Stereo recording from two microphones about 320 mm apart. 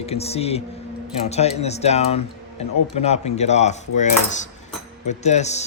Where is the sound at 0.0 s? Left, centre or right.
Centre.